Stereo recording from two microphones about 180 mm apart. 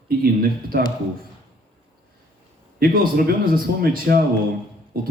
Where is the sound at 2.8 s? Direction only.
55° right (ahead or behind).